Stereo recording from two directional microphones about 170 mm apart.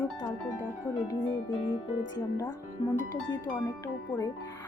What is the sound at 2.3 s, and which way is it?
Speech, 25° left (ahead or behind).